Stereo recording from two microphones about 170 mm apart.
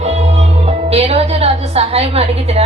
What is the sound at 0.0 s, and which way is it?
Music, 40° right (ahead or behind).